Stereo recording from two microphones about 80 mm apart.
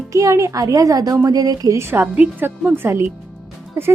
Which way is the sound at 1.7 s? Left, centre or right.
Right.